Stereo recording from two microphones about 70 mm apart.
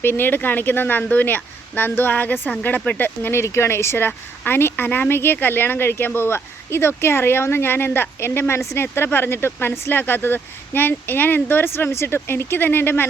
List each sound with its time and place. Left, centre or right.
0.0 s speech: left
3.4 s a woman's voice: left